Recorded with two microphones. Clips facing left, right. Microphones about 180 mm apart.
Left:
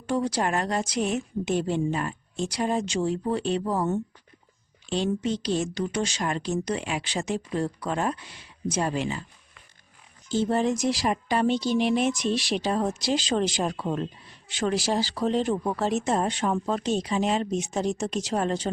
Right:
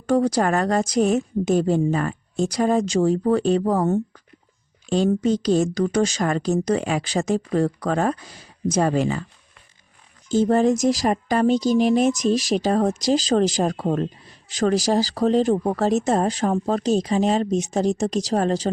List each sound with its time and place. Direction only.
0.1 s a woman's voice: 45° right (ahead or behind)
10.2 s a woman's voice: 45° right (ahead or behind)